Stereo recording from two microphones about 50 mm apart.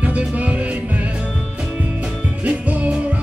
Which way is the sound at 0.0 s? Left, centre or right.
Right.